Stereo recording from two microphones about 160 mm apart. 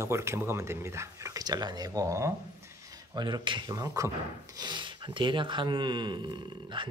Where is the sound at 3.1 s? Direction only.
30° right (ahead or behind).